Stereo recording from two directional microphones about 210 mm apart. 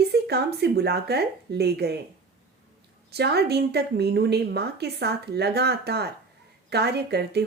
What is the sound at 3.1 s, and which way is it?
A woman's voice, 50° right (ahead or behind).